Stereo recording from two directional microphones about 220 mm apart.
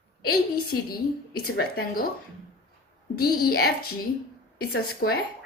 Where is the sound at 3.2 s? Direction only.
45° left (ahead or behind).